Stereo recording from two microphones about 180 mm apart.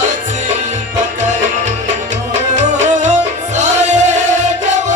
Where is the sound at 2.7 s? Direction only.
40° right (ahead or behind).